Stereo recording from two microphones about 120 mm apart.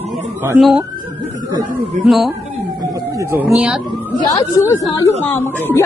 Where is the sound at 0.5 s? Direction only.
5° right (ahead or behind).